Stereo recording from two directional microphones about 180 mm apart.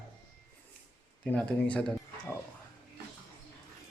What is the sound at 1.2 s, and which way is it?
Speech, 5° left (ahead or behind).